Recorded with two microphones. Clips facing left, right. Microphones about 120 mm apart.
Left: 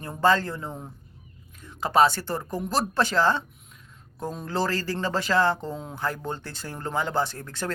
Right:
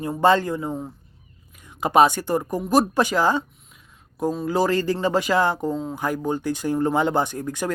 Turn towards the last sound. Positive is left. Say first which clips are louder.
# right 4 dB
turn(degrees=-15)  # may be behind; listen again after turning